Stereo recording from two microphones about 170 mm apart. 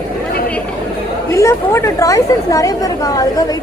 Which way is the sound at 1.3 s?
15° left (ahead or behind).